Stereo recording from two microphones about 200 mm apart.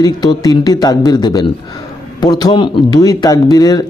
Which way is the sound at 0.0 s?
20° left (ahead or behind).